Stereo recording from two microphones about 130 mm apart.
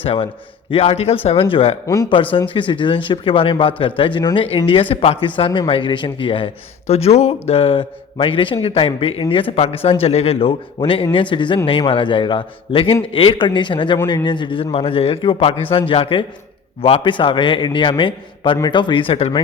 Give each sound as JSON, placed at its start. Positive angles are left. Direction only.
{"t": 0.0, "sound": "a man's voice", "side_deg": 45}